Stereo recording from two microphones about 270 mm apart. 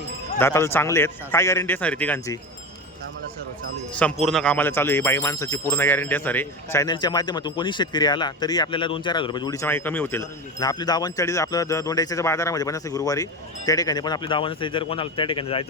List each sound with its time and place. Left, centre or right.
0.3 s speech: centre
3.9 s speech: centre